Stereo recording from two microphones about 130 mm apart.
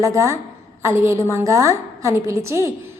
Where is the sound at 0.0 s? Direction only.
25° right (ahead or behind).